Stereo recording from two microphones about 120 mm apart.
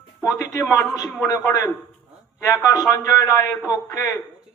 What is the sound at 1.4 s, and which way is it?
Speech, 25° left (ahead or behind).